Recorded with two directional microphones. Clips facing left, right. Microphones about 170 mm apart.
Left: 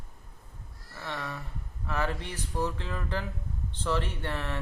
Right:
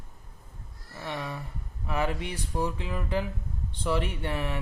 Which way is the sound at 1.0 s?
15° right (ahead or behind).